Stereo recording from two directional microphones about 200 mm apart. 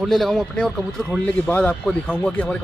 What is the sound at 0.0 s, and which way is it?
Speech, centre (ahead or behind).